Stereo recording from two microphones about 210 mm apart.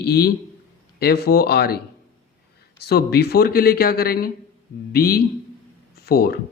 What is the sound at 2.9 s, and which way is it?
Speech, 50° left (ahead or behind).